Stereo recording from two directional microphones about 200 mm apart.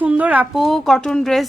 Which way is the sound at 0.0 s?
5° right (ahead or behind).